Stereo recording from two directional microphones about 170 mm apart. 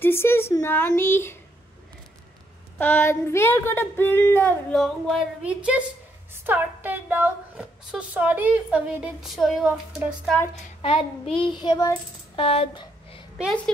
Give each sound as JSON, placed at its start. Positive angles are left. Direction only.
{"t": 0.0, "sound": "speech", "side_deg": 15}
{"t": 2.8, "sound": "a woman's voice", "side_deg": 10}
{"t": 10.8, "sound": "child singing", "side_deg": 35}
{"t": 12.4, "sound": "a sound", "side_deg": 35}